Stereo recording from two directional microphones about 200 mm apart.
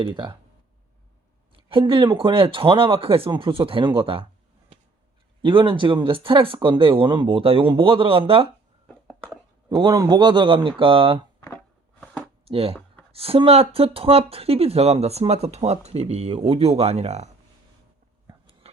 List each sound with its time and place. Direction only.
0.0 s speech: 25° right (ahead or behind)
1.5 s speech: 25° right (ahead or behind)
5.4 s speech: 25° right (ahead or behind)
9.6 s speech: 20° right (ahead or behind)
11.3 s a sound: 10° left (ahead or behind)
12.5 s speech: 30° right (ahead or behind)
18.3 s a sound: 30° right (ahead or behind)